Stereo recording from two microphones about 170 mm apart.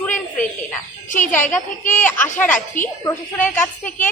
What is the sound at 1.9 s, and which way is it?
Speech, 10° left (ahead or behind).